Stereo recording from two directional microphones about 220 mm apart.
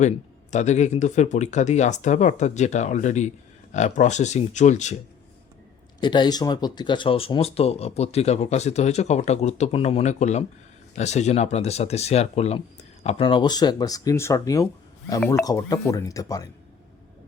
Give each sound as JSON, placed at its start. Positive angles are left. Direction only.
{"t": 0.5, "sound": "speech", "side_deg": 30}
{"t": 6.0, "sound": "speech", "side_deg": 20}